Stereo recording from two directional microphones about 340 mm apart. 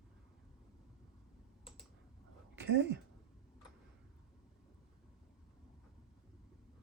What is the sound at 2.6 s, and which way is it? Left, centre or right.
Speech, right.